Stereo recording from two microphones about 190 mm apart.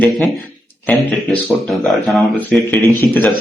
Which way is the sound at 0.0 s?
Centre (ahead or behind).